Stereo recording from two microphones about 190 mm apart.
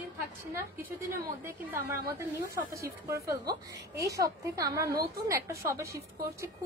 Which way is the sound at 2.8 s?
15° right (ahead or behind).